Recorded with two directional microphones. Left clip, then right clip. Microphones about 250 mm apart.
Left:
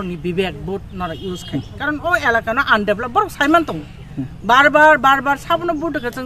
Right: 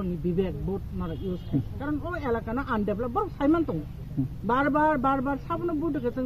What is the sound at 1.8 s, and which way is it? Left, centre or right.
Speech, left.